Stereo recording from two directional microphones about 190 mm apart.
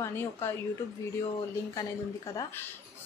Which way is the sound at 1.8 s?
15° left (ahead or behind).